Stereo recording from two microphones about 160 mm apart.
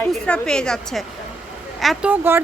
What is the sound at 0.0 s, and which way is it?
Speech, 5° left (ahead or behind).